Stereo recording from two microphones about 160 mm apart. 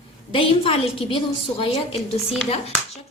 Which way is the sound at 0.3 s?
35° left (ahead or behind).